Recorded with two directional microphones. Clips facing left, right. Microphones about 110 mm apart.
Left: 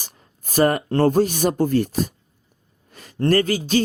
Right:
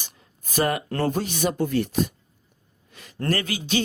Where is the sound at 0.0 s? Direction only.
40° left (ahead or behind).